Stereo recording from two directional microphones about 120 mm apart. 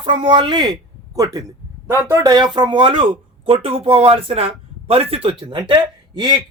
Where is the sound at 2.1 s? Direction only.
35° right (ahead or behind).